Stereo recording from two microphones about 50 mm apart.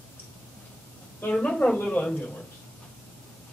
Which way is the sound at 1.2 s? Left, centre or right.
Left.